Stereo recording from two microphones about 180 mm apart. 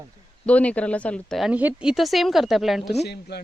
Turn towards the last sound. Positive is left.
turn(degrees=65)  # may be behind; listen again after turning